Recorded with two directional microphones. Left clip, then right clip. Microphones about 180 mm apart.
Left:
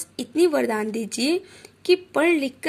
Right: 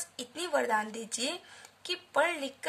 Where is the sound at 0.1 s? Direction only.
20° left (ahead or behind).